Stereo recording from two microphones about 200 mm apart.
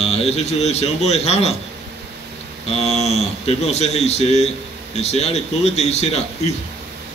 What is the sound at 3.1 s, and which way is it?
A man's voice, 35° left (ahead or behind).